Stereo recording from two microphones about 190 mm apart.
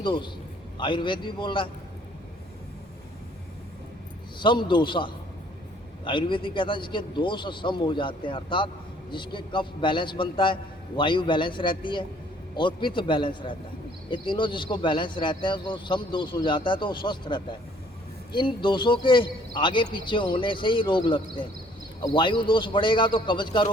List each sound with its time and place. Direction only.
0.0 s a man's voice: 25° left (ahead or behind)
4.4 s a man's voice: 25° left (ahead or behind)